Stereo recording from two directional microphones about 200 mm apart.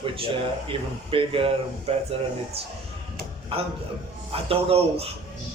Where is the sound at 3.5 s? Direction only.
30° right (ahead or behind).